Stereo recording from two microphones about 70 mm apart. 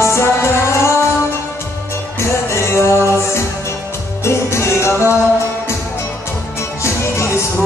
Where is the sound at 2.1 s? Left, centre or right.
Left.